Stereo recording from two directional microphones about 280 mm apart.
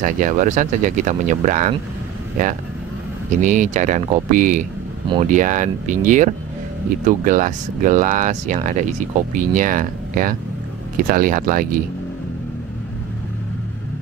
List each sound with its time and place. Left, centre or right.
0.0 s speech: right
3.3 s speech: right